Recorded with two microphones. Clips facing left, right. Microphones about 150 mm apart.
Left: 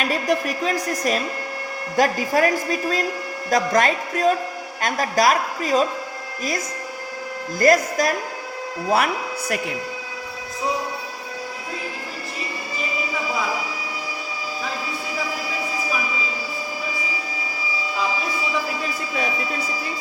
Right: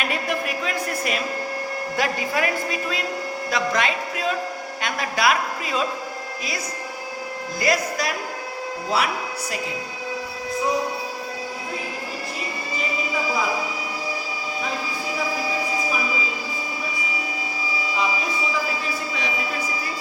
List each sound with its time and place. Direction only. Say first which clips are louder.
0.1 s a woman's voice: left 4 dB; 40° left (ahead or behind)
3.5 s music: left 5 dB; 45° left (ahead or behind)
4.8 s a woman's voice: left 4 dB; 40° left (ahead or behind)
7.6 s music: left 6 dB; 45° left (ahead or behind)